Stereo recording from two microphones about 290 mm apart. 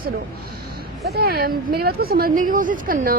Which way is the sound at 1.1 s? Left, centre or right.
Right.